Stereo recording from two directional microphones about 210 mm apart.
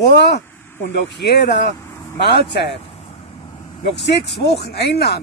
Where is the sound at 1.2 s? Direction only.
50° left (ahead or behind).